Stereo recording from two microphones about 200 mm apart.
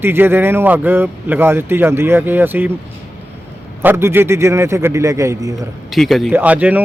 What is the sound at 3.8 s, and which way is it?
A man's voice, 10° right (ahead or behind).